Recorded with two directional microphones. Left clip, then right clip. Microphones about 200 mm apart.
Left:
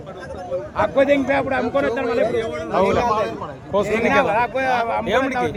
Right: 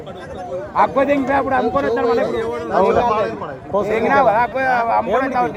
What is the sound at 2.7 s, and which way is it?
Speech, 45° left (ahead or behind).